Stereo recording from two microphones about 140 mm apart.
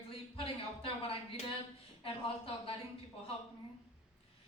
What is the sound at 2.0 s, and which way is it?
Speech, 40° left (ahead or behind).